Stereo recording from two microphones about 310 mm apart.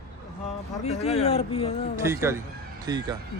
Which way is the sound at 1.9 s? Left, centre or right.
Centre.